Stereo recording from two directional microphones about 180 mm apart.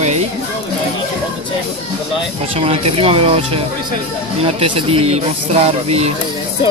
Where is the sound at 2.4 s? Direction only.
30° right (ahead or behind).